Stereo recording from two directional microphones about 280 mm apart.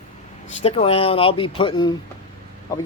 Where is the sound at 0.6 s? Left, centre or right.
Left.